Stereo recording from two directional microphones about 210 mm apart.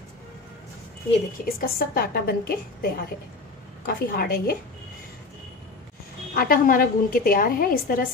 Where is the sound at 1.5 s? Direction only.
45° left (ahead or behind).